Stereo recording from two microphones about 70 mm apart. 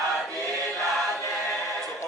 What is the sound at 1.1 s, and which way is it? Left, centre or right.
Choir, left.